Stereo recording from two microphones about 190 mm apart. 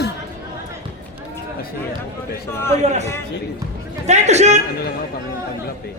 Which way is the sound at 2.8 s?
35° right (ahead or behind).